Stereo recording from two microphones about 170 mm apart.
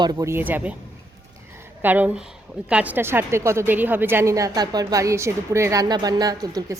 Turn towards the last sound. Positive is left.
turn(degrees=-20)  # may be behind; listen again after turning